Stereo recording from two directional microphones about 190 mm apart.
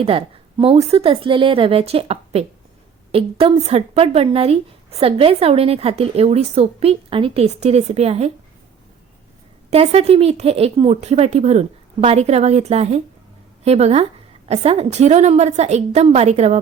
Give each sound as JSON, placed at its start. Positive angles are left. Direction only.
{"t": 0.0, "sound": "a woman's voice", "side_deg": -30}
{"t": 9.6, "sound": "speech", "side_deg": -30}